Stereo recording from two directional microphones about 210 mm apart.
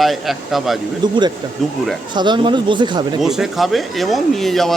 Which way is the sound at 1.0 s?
20° right (ahead or behind).